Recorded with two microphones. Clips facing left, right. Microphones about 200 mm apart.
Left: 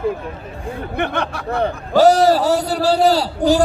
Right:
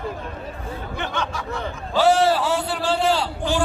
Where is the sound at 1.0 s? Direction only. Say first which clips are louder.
Left 6 dB; 60° left (ahead or behind).